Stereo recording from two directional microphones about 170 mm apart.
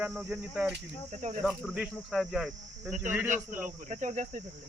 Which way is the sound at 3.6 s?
50° right (ahead or behind).